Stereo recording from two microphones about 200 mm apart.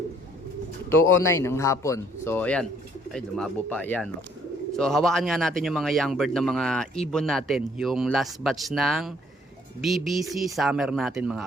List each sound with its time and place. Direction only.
1.0 s speech: 90° left
1.4 s speech: 15° left (ahead or behind); by 11.4 s 5° right (ahead or behind)